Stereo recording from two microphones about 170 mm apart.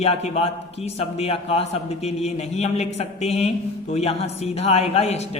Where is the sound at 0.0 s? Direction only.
40° left (ahead or behind).